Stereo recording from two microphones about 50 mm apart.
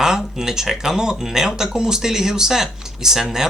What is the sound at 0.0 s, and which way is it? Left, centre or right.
Speech, centre.